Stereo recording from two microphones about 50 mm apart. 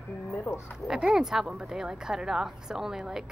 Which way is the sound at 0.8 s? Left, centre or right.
Centre.